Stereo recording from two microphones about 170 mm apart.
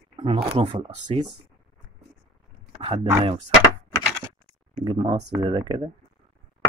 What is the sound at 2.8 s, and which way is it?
Speech, 35° right (ahead or behind).